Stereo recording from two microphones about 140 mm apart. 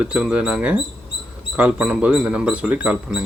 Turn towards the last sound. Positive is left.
turn(degrees=-10)  # may be behind; listen again after turning